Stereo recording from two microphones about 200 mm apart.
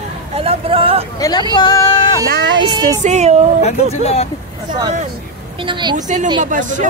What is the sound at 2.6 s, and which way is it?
Speech, 20° right (ahead or behind).